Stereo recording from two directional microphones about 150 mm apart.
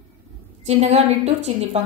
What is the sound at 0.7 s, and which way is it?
A woman's voice, 45° right (ahead or behind).